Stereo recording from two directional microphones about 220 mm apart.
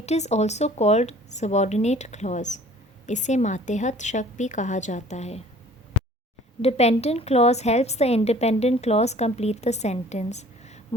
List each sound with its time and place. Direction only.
0.0 s speech: 30° left (ahead or behind)
6.6 s a woman's voice: 30° left (ahead or behind)